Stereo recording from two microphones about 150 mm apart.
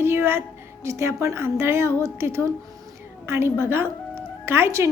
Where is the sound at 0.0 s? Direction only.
15° right (ahead or behind).